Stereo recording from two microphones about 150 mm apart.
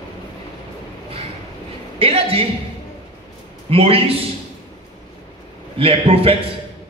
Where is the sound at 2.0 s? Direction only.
40° right (ahead or behind).